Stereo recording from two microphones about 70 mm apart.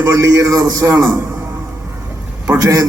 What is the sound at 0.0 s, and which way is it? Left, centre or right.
A man's voice, right.